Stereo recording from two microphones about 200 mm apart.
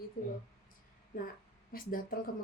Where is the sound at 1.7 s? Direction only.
45° left (ahead or behind).